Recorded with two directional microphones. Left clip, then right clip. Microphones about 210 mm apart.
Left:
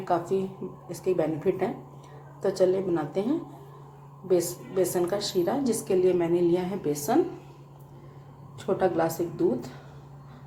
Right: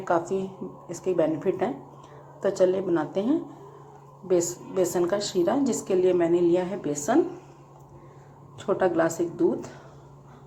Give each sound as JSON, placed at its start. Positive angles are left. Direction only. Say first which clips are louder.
{"t": 0.0, "sound": "a woman's voice", "louder": "right 1 dB", "side_deg": -15}
{"t": 8.5, "sound": "a woman's voice", "louder": "right 2 dB", "side_deg": -10}